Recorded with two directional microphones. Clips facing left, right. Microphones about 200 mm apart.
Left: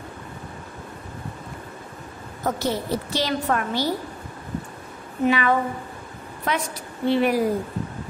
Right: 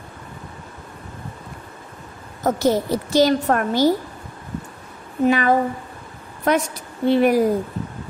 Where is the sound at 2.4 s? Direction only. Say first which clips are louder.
Right 6 dB; 45° right (ahead or behind).